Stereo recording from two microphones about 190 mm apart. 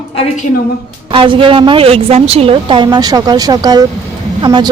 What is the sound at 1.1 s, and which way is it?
A woman's voice, 25° right (ahead or behind).